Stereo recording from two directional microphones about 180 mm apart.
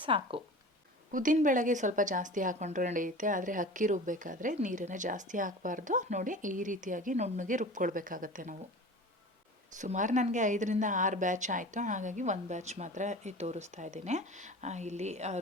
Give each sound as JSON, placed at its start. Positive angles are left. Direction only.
{"t": 0.0, "sound": "speech", "side_deg": -30}
{"t": 1.1, "sound": "speech", "side_deg": -45}
{"t": 9.7, "sound": "speech", "side_deg": -45}